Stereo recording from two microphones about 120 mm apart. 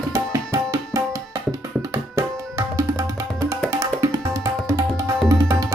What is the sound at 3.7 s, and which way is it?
Music, 25° right (ahead or behind).